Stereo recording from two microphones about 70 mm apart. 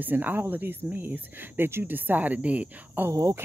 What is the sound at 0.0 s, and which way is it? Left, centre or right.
Speech, right.